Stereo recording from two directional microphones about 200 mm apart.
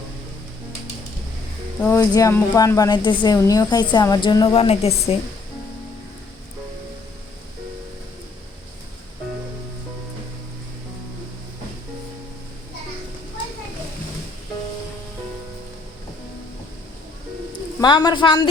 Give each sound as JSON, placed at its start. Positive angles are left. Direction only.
{"t": 1.8, "sound": "a woman's voice", "side_deg": 15}
{"t": 17.7, "sound": "a man's voice", "side_deg": 20}